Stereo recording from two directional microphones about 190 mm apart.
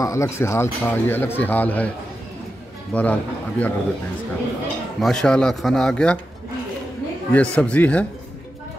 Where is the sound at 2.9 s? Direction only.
10° left (ahead or behind).